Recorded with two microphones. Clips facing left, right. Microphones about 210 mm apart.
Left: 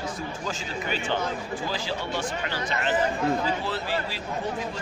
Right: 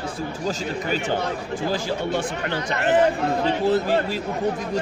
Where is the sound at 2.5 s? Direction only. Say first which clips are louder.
Right 7 dB; 60° right (ahead or behind).